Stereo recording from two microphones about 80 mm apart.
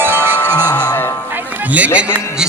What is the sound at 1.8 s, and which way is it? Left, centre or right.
Speech, centre.